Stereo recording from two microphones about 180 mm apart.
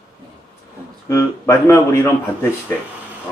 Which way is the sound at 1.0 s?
15° left (ahead or behind).